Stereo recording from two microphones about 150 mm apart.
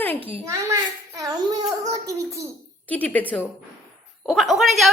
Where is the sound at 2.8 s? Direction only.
10° left (ahead or behind).